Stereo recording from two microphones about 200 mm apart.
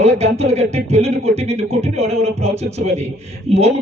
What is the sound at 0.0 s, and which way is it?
Speech, 35° right (ahead or behind).